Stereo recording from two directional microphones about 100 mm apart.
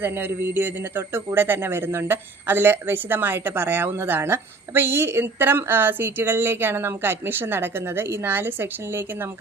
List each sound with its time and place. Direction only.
0.0 s speech: 20° right (ahead or behind)